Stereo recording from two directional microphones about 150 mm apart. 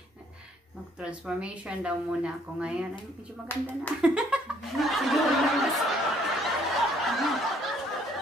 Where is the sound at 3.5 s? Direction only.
15° left (ahead or behind).